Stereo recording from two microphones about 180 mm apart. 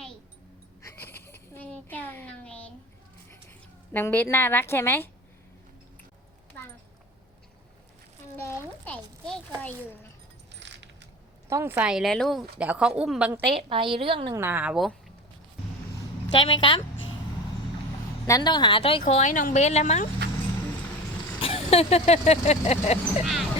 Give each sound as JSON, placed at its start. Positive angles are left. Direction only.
{"t": 0.8, "sound": "a sound", "side_deg": 15}
{"t": 3.9, "sound": "a woman's voice", "side_deg": 10}
{"t": 8.4, "sound": "a sound", "side_deg": 15}
{"t": 10.6, "sound": "coin", "side_deg": -75}
{"t": 11.4, "sound": "a woman's voice", "side_deg": -15}
{"t": 13.5, "sound": "a woman's voice", "side_deg": -30}
{"t": 14.3, "sound": "a woman's voice", "side_deg": -10}
{"t": 16.4, "sound": "a woman's voice", "side_deg": 25}
{"t": 18.3, "sound": "a woman's voice", "side_deg": 20}
{"t": 19.0, "sound": "speech", "side_deg": 45}
{"t": 21.4, "sound": "speech", "side_deg": 35}
{"t": 23.2, "sound": "speech", "side_deg": 0}